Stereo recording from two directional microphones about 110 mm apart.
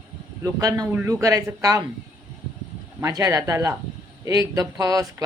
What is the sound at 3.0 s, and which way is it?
Speech, 35° right (ahead or behind).